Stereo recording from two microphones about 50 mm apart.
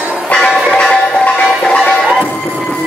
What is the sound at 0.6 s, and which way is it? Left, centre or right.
Music, centre.